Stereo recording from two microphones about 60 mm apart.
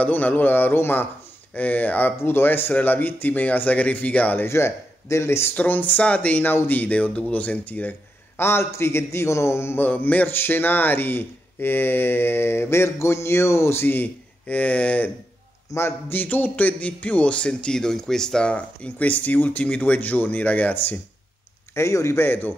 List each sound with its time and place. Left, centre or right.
0.0 s speech: left
1.5 s a man's voice: left
4.5 s a man's voice: left
5.5 s a man's voice: left
8.4 s a man's voice: left
9.8 s a man's voice: left
13.8 s speech: left
15.7 s a man's voice: left
16.1 s a man's voice: left
21.7 s a man's voice: left
22.2 s speech: left